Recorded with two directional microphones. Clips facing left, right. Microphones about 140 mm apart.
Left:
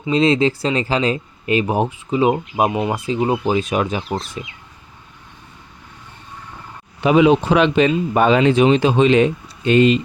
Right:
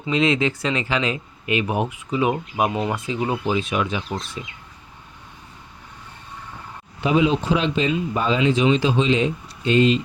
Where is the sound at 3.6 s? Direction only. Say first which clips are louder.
Left 4 dB; 45° left (ahead or behind).